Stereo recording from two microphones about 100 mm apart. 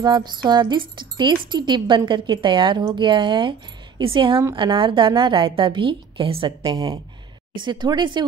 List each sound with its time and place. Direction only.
0.0 s a woman's voice: 45° right (ahead or behind); by 6.5 s 60° right (ahead or behind)
6.6 s speech: 50° right (ahead or behind)